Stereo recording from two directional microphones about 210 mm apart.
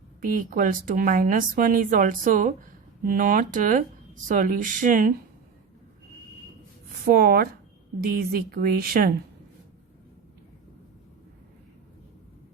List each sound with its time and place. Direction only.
0.2 s speech: 40° right (ahead or behind)
7.0 s a woman's voice: 45° right (ahead or behind)